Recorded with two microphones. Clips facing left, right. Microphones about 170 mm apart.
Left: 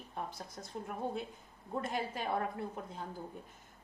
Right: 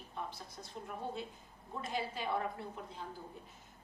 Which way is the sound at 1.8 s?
50° left (ahead or behind).